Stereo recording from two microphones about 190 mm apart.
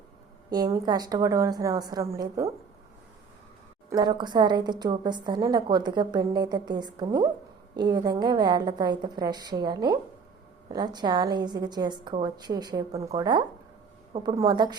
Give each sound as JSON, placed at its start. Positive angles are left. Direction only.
{"t": 0.5, "sound": "a woman's voice", "side_deg": -20}
{"t": 3.8, "sound": "a woman's voice", "side_deg": -20}